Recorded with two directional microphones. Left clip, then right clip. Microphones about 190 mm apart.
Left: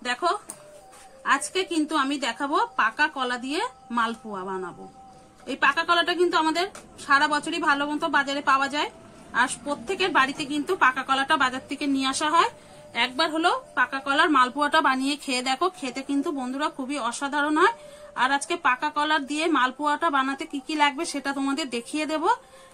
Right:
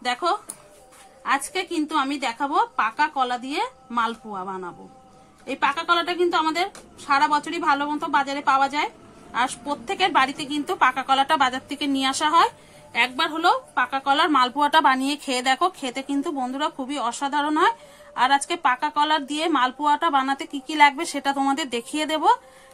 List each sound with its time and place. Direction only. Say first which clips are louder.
0.0 s a woman's voice: right 2 dB; 35° right (ahead or behind)